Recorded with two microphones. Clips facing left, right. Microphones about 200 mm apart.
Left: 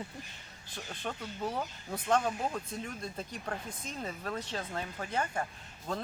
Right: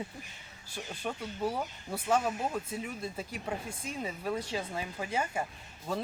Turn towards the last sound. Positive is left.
turn(degrees=-5)  # may be behind; listen again after turning